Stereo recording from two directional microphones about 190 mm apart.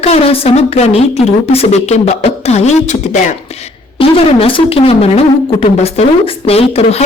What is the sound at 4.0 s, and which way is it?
A woman's voice, 30° left (ahead or behind).